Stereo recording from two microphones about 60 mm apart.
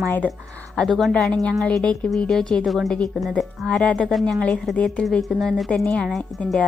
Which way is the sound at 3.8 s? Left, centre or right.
Centre.